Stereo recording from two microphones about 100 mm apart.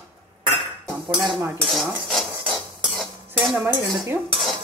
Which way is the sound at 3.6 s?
25° right (ahead or behind).